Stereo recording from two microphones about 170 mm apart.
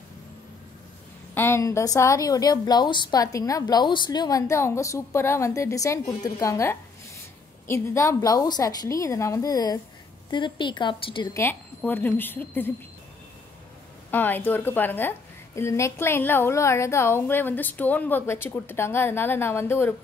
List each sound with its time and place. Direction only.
1.3 s a woman's voice: 15° left (ahead or behind)
11.3 s a woman's voice: 10° left (ahead or behind)
14.1 s a woman's voice: 10° left (ahead or behind)